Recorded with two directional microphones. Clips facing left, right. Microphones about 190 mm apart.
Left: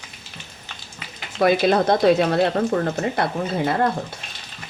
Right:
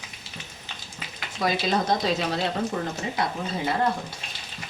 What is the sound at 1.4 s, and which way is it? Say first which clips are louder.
Speech: left 8 dB; 60° left (ahead or behind).